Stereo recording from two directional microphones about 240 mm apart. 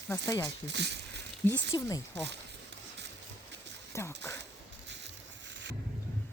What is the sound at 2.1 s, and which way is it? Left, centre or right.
Speech, right.